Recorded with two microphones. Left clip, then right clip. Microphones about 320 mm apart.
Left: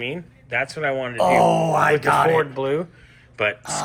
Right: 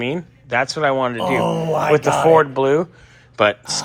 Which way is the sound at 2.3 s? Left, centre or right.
Centre.